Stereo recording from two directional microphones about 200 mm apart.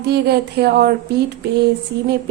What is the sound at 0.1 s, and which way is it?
Speech, 55° right (ahead or behind).